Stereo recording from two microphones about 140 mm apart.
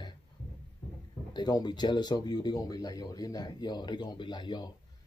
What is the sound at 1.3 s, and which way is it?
Speech, 30° left (ahead or behind).